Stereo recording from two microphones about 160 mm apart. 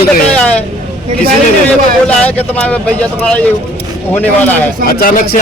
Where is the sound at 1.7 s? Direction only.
5° left (ahead or behind).